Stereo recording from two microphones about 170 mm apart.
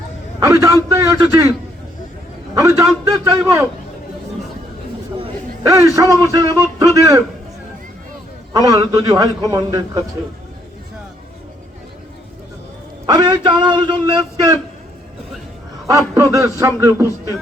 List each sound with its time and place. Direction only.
0.3 s a man's voice: 15° right (ahead or behind)
2.6 s speech: 20° right (ahead or behind)
6.0 s speech: 20° right (ahead or behind)
8.5 s speech: 20° right (ahead or behind)
13.1 s speech: 25° right (ahead or behind)
15.9 s a man's voice: 20° right (ahead or behind)